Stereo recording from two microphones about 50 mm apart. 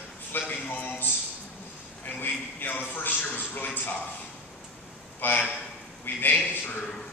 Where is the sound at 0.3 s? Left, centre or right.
Left.